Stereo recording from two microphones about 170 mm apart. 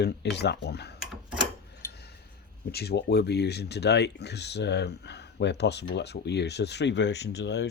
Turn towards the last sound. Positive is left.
turn(degrees=85)